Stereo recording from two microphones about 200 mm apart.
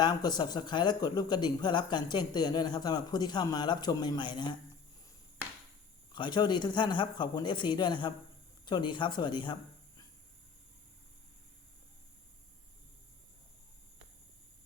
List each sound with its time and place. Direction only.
0.0 s speech: 20° left (ahead or behind)
6.1 s speech: 25° left (ahead or behind)